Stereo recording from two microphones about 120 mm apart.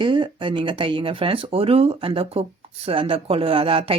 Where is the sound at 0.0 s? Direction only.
45° right (ahead or behind).